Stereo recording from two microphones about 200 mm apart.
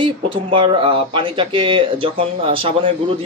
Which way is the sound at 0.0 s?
25° right (ahead or behind).